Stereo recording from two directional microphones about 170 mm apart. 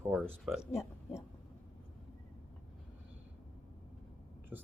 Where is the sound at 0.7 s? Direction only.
15° left (ahead or behind).